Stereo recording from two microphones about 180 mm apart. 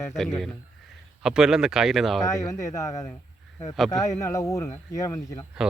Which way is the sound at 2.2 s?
15° left (ahead or behind).